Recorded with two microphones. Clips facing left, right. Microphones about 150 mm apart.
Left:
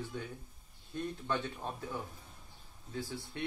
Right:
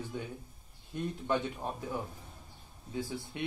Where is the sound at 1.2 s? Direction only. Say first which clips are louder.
Right 6 dB; 15° right (ahead or behind).